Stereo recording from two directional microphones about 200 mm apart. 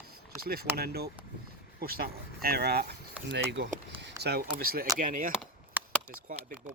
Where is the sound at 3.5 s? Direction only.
60° right (ahead or behind).